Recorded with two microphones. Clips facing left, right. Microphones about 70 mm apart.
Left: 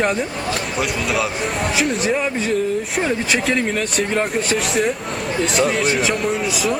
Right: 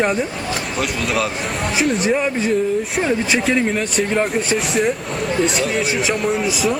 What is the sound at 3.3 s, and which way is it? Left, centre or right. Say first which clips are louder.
Speech: right 2 dB; centre.